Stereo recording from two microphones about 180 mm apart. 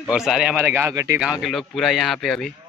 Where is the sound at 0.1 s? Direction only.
5° right (ahead or behind).